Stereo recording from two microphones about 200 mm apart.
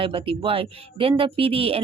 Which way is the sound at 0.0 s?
25° right (ahead or behind).